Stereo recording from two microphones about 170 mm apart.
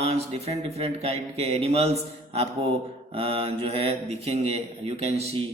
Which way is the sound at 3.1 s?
35° right (ahead or behind).